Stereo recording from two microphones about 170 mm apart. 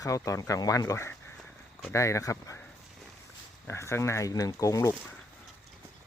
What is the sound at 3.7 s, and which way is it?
Speech, 15° left (ahead or behind).